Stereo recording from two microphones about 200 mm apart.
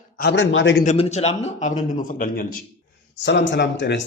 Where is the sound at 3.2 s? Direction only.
60° left (ahead or behind).